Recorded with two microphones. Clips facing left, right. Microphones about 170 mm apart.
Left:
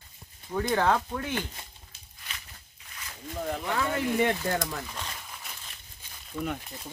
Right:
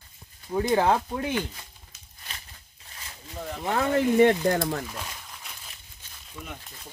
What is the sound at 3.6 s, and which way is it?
Speech, 45° right (ahead or behind).